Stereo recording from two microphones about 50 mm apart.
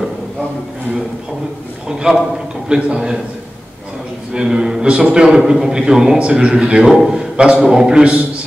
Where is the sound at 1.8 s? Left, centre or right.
Centre.